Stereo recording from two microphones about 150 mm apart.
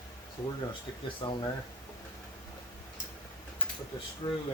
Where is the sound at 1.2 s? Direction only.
35° left (ahead or behind).